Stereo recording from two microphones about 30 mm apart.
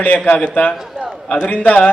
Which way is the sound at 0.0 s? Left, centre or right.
Left.